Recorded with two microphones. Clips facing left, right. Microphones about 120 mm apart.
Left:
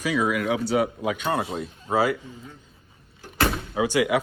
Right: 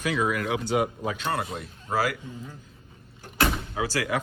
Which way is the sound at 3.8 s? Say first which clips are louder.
Left 6 dB; 15° left (ahead or behind).